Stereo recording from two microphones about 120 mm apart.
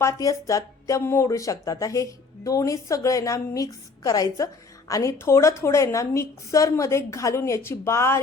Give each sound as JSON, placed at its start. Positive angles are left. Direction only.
{"t": 0.0, "sound": "speech", "side_deg": 25}